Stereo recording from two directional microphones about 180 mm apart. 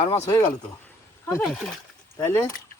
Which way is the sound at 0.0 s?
30° left (ahead or behind).